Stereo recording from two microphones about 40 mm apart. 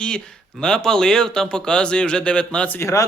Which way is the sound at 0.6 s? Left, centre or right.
Centre.